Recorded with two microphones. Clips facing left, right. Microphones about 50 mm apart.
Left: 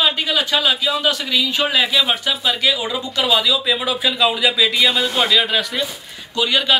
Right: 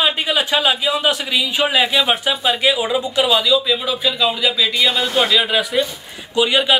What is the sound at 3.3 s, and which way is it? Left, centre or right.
Speech, centre.